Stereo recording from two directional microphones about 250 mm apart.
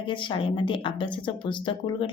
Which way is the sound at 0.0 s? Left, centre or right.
Centre.